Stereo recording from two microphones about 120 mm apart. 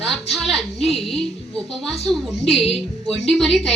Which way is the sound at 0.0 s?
Centre (ahead or behind).